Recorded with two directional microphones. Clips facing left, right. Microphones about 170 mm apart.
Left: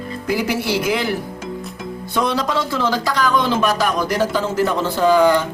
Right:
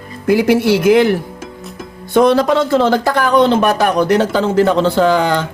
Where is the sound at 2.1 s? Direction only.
55° right (ahead or behind); by 5.2 s 70° right (ahead or behind).